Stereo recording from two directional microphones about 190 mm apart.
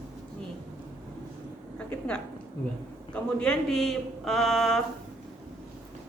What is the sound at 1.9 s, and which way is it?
Speech, 5° left (ahead or behind).